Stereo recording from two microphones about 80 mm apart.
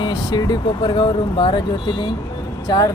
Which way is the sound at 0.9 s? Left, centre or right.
Left.